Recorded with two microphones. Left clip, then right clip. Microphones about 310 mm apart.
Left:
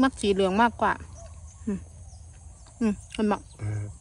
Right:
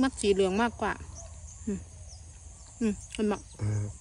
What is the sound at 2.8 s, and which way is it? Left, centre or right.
Speech, centre.